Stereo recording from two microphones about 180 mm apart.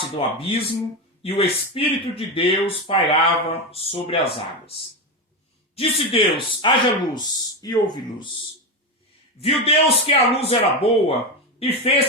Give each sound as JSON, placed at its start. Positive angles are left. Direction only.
{"t": 0.2, "sound": "speech", "side_deg": 30}
{"t": 9.4, "sound": "speech", "side_deg": 30}